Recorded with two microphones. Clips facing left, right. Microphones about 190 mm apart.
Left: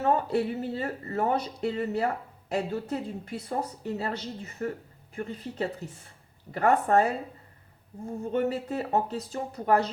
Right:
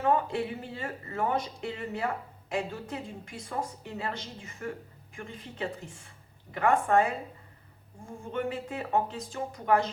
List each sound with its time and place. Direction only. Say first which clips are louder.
0.0 s speech: left 2 dB; 40° left (ahead or behind)
8.2 s speech: left 5 dB; 40° left (ahead or behind)